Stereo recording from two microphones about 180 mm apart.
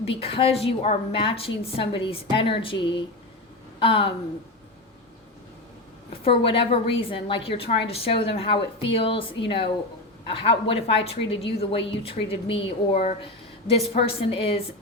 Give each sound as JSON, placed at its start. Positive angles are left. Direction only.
{"t": 0.0, "sound": "a woman's voice", "side_deg": 30}
{"t": 6.2, "sound": "a woman's voice", "side_deg": 30}